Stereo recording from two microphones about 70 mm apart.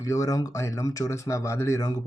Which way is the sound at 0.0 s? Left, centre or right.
Left.